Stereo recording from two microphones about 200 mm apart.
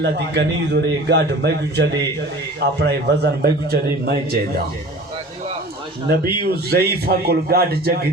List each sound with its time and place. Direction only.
0.0 s a man's voice: 60° right (ahead or behind)
6.1 s a man's voice: 55° right (ahead or behind)